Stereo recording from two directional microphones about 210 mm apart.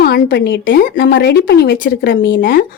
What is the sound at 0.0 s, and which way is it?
A woman's voice, 50° left (ahead or behind).